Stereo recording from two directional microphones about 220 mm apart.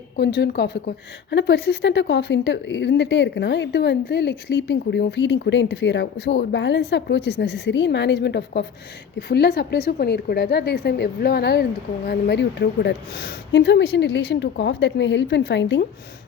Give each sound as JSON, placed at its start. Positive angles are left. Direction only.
{"t": 0.3, "sound": "a woman's voice", "side_deg": 50}